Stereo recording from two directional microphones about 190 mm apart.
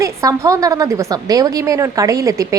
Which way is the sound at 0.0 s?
15° right (ahead or behind).